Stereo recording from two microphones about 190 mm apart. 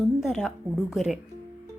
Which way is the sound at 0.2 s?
5° right (ahead or behind).